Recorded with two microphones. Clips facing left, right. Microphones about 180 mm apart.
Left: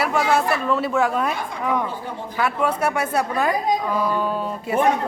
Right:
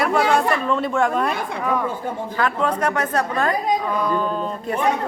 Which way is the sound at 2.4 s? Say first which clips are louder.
Even; 10° left (ahead or behind).